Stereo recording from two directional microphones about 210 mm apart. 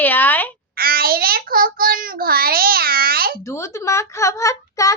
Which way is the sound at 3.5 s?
15° left (ahead or behind).